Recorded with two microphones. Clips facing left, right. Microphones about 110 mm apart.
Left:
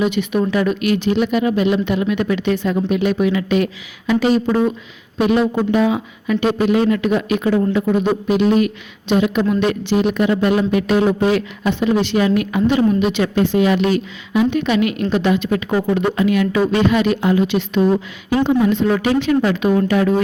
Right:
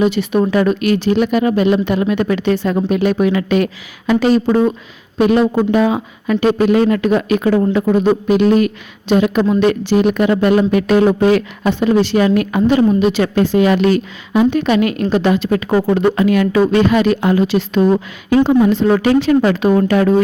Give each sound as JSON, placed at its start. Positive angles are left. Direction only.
{"t": 0.0, "sound": "speech", "side_deg": -40}
{"t": 18.4, "sound": "a woman's voice", "side_deg": -35}